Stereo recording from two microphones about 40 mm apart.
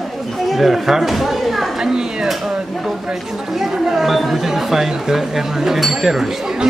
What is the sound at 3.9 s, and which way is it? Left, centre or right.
A man's voice, centre.